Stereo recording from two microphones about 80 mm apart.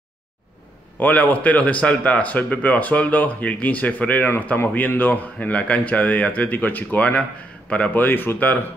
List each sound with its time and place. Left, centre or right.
0.9 s a man's voice: centre